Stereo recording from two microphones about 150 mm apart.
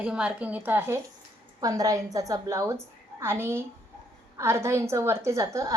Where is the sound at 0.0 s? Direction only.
5° right (ahead or behind).